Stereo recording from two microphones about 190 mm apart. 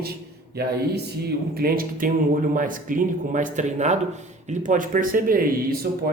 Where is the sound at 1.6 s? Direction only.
50° right (ahead or behind).